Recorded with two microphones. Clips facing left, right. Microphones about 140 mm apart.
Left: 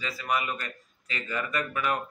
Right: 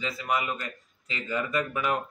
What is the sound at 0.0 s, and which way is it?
Speech, 20° right (ahead or behind).